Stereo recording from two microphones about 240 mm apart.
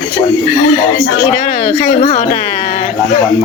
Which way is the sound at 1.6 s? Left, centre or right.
Left.